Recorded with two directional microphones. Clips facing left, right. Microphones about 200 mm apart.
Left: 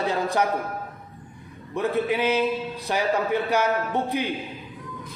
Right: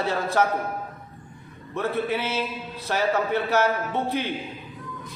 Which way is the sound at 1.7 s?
15° left (ahead or behind).